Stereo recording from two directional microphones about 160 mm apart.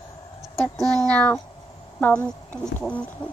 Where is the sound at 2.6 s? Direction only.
5° left (ahead or behind).